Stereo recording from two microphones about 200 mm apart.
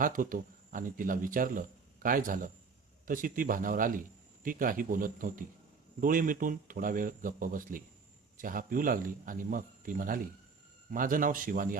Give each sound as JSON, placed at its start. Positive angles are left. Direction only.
{"t": 0.0, "sound": "speech", "side_deg": -45}